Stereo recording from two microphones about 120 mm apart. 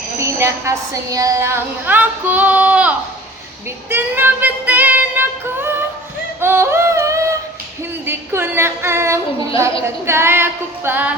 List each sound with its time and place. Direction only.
0.2 s a woman's voice: 20° right (ahead or behind)
3.8 s child singing: 15° right (ahead or behind)
6.4 s yodeling: 20° right (ahead or behind)
8.0 s a woman's voice: 20° right (ahead or behind)